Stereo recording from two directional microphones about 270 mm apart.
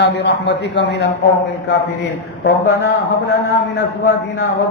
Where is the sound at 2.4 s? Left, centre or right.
Left.